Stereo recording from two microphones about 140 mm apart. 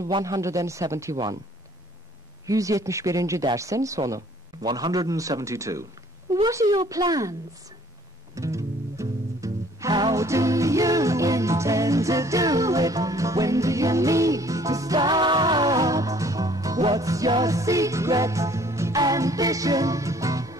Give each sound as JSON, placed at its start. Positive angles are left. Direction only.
{"t": 0.2, "sound": "speech", "side_deg": -20}
{"t": 2.4, "sound": "speech", "side_deg": -25}
{"t": 8.4, "sound": "music", "side_deg": -20}